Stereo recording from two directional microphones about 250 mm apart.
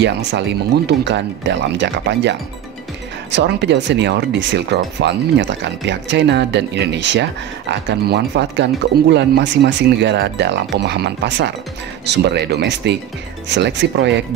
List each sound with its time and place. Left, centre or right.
0.0 s speech: right